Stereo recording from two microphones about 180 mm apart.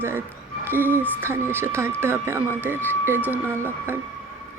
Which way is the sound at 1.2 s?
10° right (ahead or behind).